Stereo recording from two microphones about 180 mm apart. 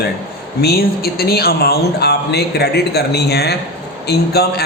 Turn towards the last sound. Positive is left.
turn(degrees=60)  # may be behind; listen again after turning